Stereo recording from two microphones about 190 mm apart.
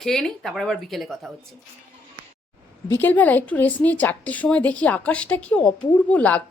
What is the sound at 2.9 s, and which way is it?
A woman's voice, 10° left (ahead or behind).